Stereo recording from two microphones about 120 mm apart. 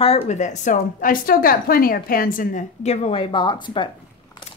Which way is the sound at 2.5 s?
80° left.